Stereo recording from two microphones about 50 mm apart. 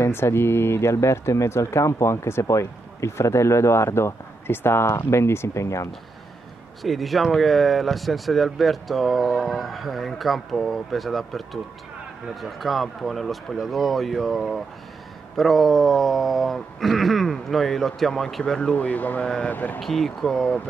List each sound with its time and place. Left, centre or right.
0.0 s speech: left
6.8 s speech: centre
18.5 s speech: centre
18.8 s speech: left
19.2 s speech: centre
19.5 s speech: left
19.8 s speech: centre